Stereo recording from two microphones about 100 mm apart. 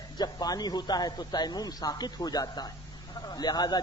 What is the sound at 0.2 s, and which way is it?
A man's voice, 40° left (ahead or behind).